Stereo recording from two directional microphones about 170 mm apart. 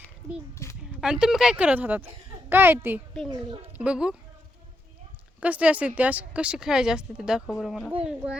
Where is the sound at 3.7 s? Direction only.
5° right (ahead or behind).